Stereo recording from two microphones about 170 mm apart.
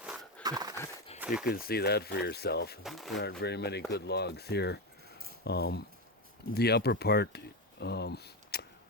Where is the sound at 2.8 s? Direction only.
Centre (ahead or behind).